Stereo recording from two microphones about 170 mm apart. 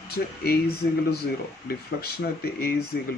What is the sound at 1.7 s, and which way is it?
Speech, 65° left (ahead or behind).